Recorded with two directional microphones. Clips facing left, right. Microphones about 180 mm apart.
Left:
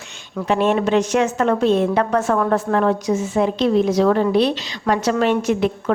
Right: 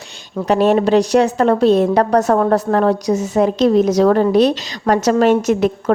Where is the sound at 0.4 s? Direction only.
40° right (ahead or behind).